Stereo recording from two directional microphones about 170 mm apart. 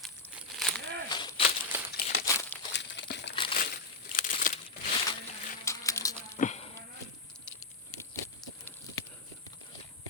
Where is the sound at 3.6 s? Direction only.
55° left (ahead or behind).